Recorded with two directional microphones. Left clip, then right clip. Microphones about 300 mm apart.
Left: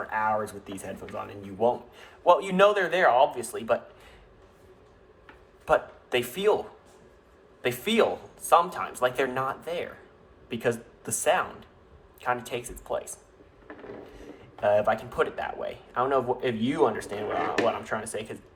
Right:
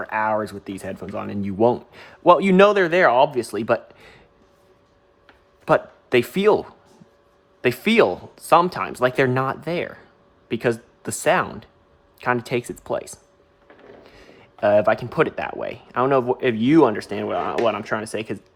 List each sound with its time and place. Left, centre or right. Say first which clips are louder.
0.1 s speech: right 5 dB; right
5.6 s speech: right 5 dB; right
7.6 s speech: right 7 dB; right
14.2 s speech: right 8 dB; right